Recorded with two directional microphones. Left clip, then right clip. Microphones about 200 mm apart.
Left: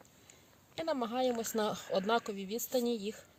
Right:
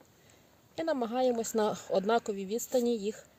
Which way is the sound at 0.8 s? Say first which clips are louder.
Right 4 dB; 30° right (ahead or behind).